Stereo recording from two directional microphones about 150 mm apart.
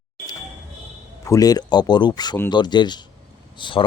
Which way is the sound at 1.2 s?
25° left (ahead or behind).